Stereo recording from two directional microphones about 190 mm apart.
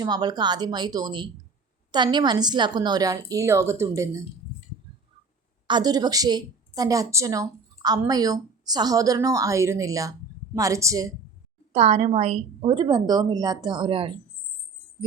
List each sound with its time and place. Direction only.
0.0 s a woman's voice: 20° right (ahead or behind)
5.6 s a woman's voice: 20° right (ahead or behind)
11.7 s a woman's voice: 35° right (ahead or behind)